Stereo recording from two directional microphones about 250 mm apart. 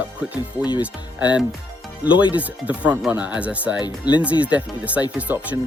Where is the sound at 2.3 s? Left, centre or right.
Centre.